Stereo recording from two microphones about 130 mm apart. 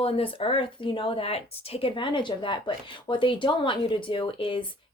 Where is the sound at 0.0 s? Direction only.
45° left (ahead or behind).